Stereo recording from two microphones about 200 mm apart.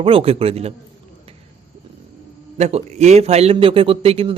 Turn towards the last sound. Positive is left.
turn(degrees=-30)  # may be behind; listen again after turning